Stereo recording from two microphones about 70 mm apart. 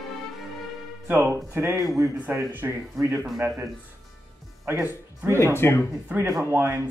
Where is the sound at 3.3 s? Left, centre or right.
Centre.